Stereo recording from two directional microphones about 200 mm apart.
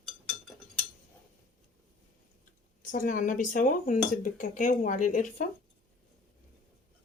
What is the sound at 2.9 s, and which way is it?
Speech, 40° left (ahead or behind).